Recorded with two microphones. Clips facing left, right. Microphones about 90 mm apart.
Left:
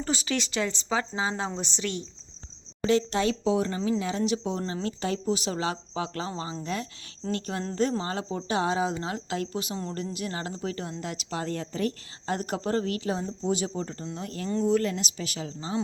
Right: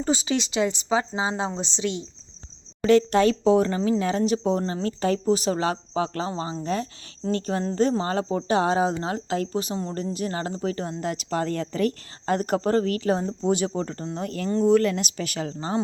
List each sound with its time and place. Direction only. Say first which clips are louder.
0.0 s speech: right 5 dB; 20° right (ahead or behind)
2.8 s speech: right 6 dB; 55° right (ahead or behind)